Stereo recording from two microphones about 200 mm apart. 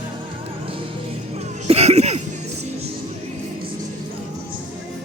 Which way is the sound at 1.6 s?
30° right (ahead or behind).